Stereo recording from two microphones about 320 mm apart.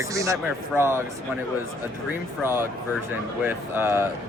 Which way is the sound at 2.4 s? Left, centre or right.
Centre.